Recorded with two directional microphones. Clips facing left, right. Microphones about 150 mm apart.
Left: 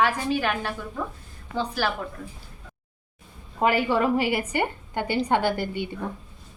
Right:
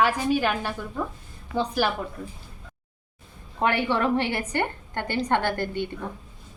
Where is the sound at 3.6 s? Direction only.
5° left (ahead or behind).